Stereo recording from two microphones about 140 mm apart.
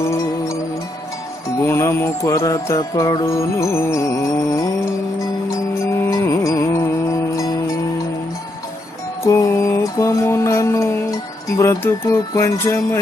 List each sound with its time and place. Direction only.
1.6 s music: 20° left (ahead or behind)
9.2 s mantra: 20° left (ahead or behind)